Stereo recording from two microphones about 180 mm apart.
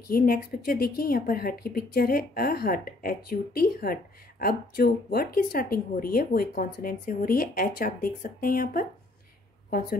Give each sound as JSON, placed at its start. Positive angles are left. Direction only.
{"t": 0.1, "sound": "speech", "side_deg": 55}